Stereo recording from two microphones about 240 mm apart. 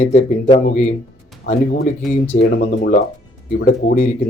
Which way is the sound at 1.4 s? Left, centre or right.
Left.